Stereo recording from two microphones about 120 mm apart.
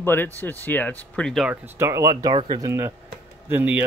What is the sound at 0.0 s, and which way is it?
Speech, 15° left (ahead or behind).